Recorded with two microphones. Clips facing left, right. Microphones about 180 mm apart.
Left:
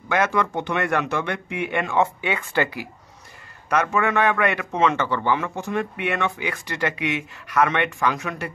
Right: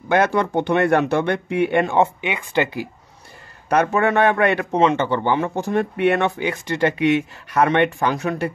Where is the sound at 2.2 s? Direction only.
20° right (ahead or behind).